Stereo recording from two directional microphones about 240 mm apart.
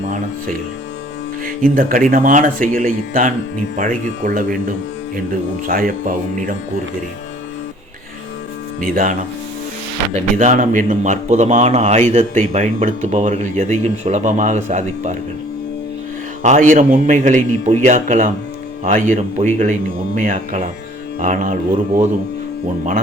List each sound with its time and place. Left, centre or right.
1.5 s speech: right
5.6 s speech: right
8.8 s speech: right
16.4 s speech: right